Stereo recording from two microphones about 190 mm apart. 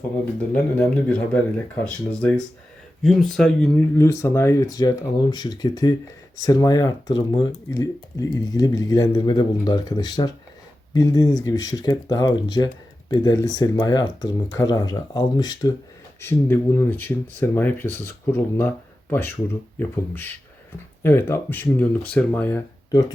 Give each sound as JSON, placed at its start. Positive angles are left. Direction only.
{"t": 0.5, "sound": "speech", "side_deg": 5}
{"t": 19.8, "sound": "speech", "side_deg": 10}